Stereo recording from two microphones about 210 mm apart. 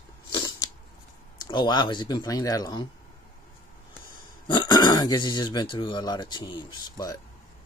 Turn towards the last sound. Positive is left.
turn(degrees=20)  # may be behind; listen again after turning